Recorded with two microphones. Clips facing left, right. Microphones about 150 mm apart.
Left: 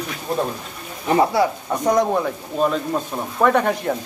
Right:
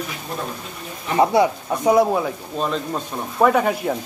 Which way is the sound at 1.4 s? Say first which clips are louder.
Right 1 dB; 20° right (ahead or behind).